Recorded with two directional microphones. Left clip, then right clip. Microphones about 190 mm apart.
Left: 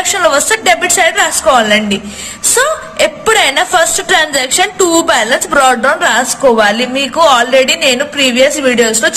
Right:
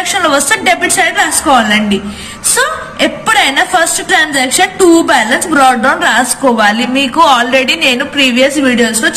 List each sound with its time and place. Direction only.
0.1 s a woman's voice: 40° left (ahead or behind)